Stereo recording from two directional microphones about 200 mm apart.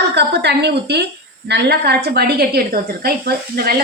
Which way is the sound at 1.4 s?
55° right (ahead or behind).